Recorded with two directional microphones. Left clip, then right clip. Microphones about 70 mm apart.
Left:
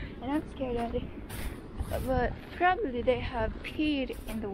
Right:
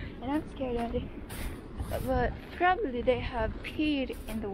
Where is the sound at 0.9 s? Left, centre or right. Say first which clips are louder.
Even; centre.